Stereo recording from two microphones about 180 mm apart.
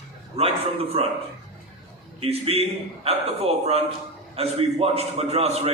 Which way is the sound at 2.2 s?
35° right (ahead or behind).